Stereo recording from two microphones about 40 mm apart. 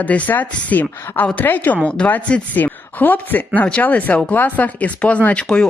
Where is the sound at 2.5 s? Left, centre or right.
Left.